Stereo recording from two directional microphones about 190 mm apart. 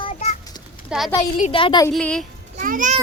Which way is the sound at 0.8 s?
Centre (ahead or behind).